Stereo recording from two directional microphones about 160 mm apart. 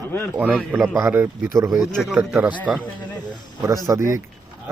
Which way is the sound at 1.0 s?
15° right (ahead or behind).